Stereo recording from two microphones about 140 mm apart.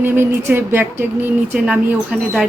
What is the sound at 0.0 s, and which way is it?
Speech, 15° right (ahead or behind).